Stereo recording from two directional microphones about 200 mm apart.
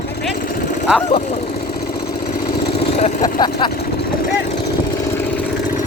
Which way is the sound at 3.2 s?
20° left (ahead or behind).